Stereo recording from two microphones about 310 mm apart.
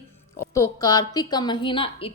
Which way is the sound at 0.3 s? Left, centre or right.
Centre.